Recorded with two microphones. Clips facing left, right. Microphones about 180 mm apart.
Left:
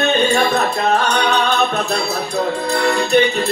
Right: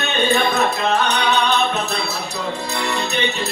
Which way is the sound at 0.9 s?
50° left (ahead or behind).